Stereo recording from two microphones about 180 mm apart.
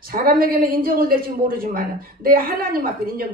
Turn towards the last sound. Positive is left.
turn(degrees=-55)  # may be behind; listen again after turning